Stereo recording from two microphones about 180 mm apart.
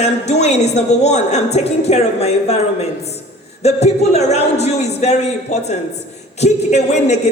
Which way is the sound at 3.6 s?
35° left (ahead or behind).